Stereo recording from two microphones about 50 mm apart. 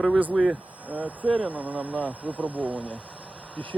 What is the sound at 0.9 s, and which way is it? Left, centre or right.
Speech, right.